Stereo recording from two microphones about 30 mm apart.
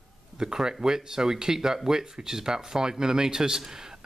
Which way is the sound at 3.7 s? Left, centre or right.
Centre.